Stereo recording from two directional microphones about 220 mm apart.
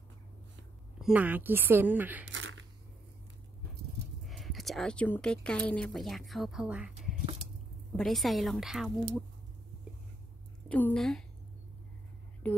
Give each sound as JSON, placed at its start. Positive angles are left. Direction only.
{"t": 0.9, "sound": "a woman's voice", "side_deg": -5}
{"t": 2.2, "sound": "a sound", "side_deg": -60}
{"t": 4.2, "sound": "a woman's voice", "side_deg": 0}
{"t": 10.7, "sound": "a woman's voice", "side_deg": 5}
{"t": 12.4, "sound": "speech", "side_deg": 5}